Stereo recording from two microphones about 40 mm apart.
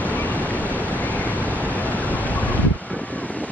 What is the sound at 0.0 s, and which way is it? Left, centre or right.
Vehicle, left.